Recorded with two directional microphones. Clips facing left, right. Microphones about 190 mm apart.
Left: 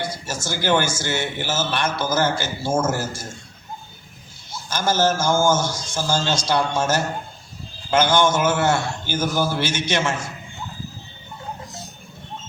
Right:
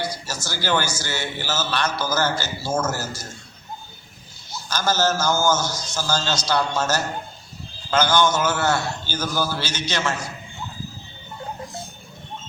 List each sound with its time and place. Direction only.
0.0 s a man's voice: 25° left (ahead or behind)
4.7 s a man's voice: 25° left (ahead or behind)